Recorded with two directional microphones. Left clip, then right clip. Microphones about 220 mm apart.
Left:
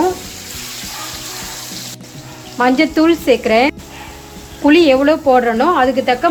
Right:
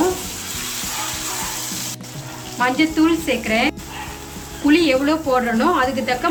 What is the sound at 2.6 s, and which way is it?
Sizzle, 20° left (ahead or behind).